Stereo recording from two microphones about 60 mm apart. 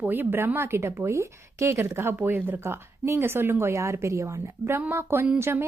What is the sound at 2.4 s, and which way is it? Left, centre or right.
Speech, right.